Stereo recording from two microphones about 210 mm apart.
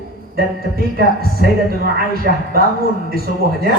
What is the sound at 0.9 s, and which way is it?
Speech, 45° right (ahead or behind).